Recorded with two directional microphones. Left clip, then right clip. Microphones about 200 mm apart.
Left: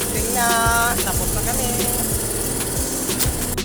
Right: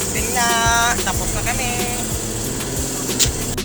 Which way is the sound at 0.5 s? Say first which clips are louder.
Right 2 dB; 20° left (ahead or behind).